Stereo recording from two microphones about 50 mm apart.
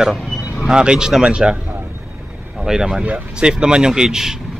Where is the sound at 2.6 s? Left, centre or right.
Centre.